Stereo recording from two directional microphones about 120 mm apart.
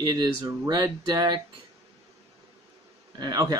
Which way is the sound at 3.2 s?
30° right (ahead or behind).